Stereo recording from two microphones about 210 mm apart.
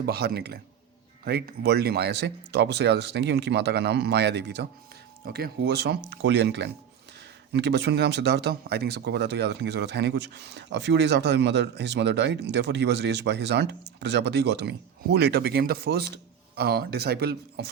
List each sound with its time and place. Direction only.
0.0 s speech: 50° right (ahead or behind)